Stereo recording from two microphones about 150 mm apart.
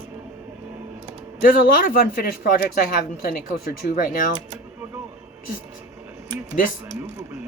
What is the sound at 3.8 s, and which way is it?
Speech, 70° left (ahead or behind).